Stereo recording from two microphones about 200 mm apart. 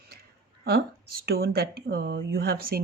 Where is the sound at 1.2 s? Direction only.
50° right (ahead or behind).